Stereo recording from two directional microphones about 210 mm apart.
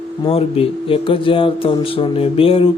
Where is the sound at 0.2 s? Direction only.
25° left (ahead or behind).